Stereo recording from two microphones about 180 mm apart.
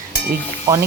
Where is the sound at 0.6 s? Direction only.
15° right (ahead or behind).